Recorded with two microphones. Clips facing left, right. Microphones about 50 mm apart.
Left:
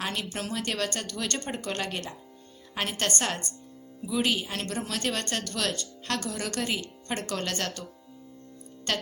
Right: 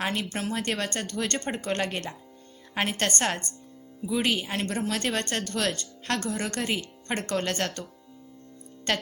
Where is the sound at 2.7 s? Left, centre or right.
Right.